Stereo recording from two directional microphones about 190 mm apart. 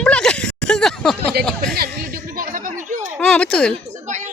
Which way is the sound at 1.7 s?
50° right (ahead or behind).